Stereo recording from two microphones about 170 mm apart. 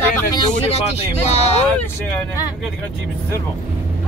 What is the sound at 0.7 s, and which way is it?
Speech, 40° left (ahead or behind).